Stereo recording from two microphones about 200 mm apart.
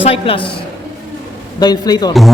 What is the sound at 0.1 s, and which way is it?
Speech, 25° left (ahead or behind).